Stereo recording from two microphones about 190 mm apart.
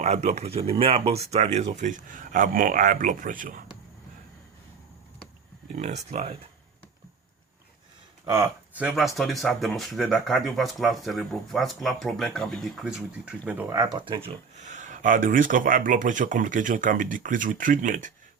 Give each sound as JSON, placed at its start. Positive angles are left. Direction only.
{"t": 0.0, "sound": "speech", "side_deg": -35}
{"t": 5.7, "sound": "speech", "side_deg": -40}
{"t": 8.2, "sound": "speech", "side_deg": -20}
{"t": 8.7, "sound": "speech", "side_deg": -5}
{"t": 13.7, "sound": "speech", "side_deg": -20}
{"t": 14.6, "sound": "speech", "side_deg": -40}